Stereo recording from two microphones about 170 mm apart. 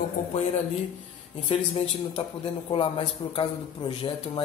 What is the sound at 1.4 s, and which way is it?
A man's voice, 35° left (ahead or behind).